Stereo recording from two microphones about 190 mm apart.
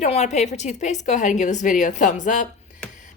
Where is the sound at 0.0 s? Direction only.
35° left (ahead or behind).